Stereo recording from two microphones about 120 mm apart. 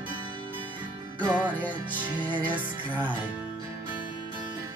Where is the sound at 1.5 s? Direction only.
15° left (ahead or behind).